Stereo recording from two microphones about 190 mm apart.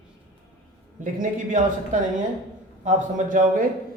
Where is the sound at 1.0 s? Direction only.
45° right (ahead or behind).